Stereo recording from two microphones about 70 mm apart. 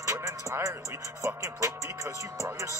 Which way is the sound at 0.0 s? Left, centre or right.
Right.